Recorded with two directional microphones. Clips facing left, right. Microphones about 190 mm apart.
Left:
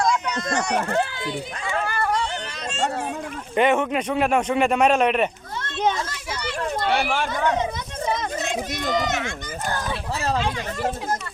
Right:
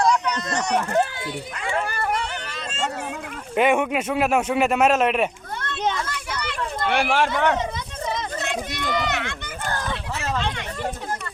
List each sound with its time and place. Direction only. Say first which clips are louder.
3.5 s a man's voice: even; 10° right (ahead or behind)
6.1 s a sound: even; 60° right (ahead or behind); by 7.5 s 75° right (ahead or behind)
8.7 s speech: left 2 dB; 45° left (ahead or behind)
9.0 s speech: left 1 dB; 60° right (ahead or behind)